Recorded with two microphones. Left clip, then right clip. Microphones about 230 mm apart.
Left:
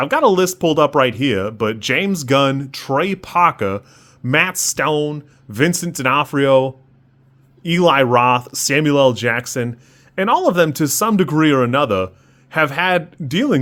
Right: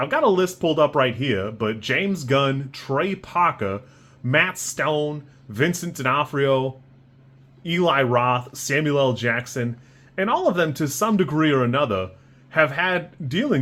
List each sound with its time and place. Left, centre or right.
0.0 s speech: left